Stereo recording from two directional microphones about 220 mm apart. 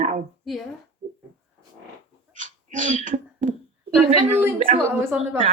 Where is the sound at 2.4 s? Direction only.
35° right (ahead or behind).